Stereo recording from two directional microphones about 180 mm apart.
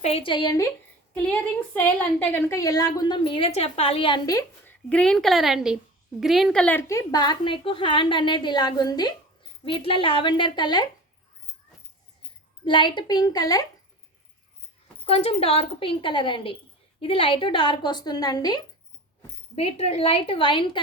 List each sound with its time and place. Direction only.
0.0 s a woman's voice: 30° left (ahead or behind)
1.1 s a woman's voice: 10° left (ahead or behind); by 10.8 s 25° left (ahead or behind)
12.6 s a woman's voice: 25° left (ahead or behind)
15.0 s a woman's voice: 35° left (ahead or behind)
19.5 s a woman's voice: 35° left (ahead or behind)